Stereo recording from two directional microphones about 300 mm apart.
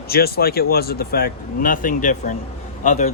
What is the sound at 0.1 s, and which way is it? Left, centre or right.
A man's voice, left.